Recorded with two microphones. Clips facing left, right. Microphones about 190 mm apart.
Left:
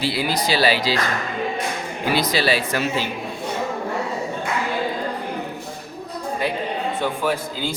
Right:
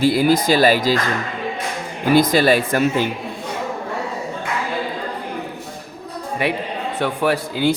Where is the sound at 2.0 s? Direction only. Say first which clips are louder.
Right 7 dB; 50° right (ahead or behind).